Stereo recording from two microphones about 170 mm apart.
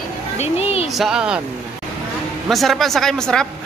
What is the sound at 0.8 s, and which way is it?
Speech, centre (ahead or behind).